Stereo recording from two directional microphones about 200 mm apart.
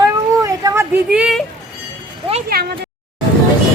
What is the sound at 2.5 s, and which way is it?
Speech, 50° right (ahead or behind).